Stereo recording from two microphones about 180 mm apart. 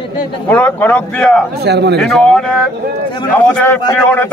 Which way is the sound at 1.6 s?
65° right (ahead or behind).